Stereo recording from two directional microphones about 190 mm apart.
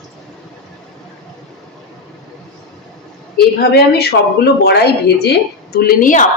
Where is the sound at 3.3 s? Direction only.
55° left (ahead or behind).